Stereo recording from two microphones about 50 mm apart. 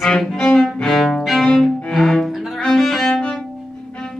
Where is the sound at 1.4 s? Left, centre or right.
Centre.